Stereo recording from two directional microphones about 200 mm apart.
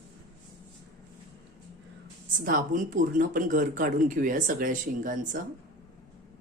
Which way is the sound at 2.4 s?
40° right (ahead or behind).